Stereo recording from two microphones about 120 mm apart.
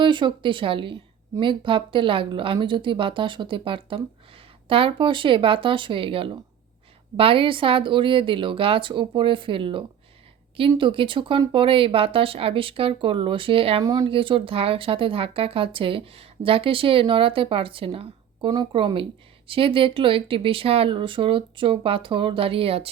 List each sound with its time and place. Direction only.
0.0 s speech: 40° right (ahead or behind)
13.8 s speech: 30° right (ahead or behind)
14.1 s speech: 45° right (ahead or behind)